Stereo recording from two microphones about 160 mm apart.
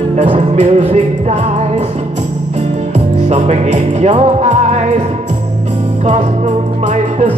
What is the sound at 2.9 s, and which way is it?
Music, 45° right (ahead or behind).